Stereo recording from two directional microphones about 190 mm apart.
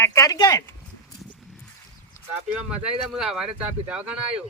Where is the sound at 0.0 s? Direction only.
15° left (ahead or behind).